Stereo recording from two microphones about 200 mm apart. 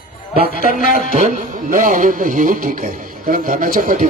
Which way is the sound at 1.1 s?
40° right (ahead or behind).